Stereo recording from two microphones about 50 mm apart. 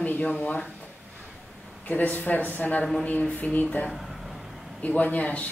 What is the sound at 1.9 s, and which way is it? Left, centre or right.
Speech, left.